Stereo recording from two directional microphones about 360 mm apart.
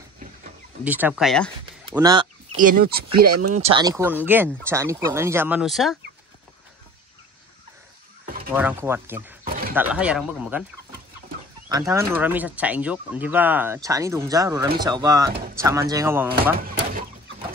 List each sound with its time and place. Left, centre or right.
0.8 s speech: centre
3.3 s speech: right
3.7 s speech: centre
8.5 s speech: centre
9.5 s a sound: right
9.8 s speech: centre
11.7 s speech: centre
16.5 s chicken: right